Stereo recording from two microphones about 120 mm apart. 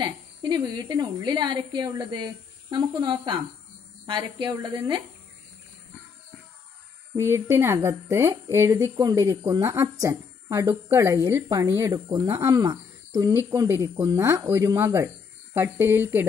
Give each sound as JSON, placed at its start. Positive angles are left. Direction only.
{"t": 0.0, "sound": "a woman's voice", "side_deg": -35}
{"t": 7.2, "sound": "speech", "side_deg": -20}